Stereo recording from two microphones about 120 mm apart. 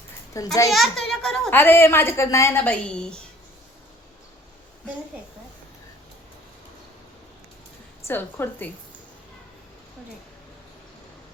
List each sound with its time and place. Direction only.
0.4 s a woman's voice: 25° left (ahead or behind)
0.7 s a child's voice: centre (ahead or behind)
1.5 s a woman's voice: 15° left (ahead or behind)
2.6 s a woman's voice: 10° left (ahead or behind)
8.0 s a woman's voice: 20° left (ahead or behind)